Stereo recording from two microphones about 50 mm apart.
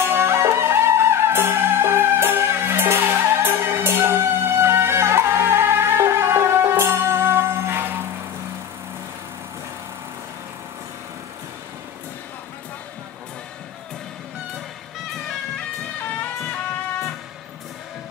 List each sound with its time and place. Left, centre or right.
0.1 s music: right